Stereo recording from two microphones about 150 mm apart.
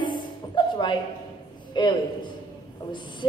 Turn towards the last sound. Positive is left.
turn(degrees=30)  # may be behind; listen again after turning